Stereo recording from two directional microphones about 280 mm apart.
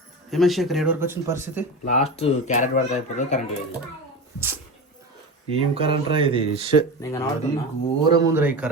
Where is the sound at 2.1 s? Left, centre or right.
Left.